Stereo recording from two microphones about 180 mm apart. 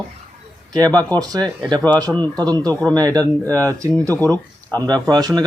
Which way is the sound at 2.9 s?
20° right (ahead or behind).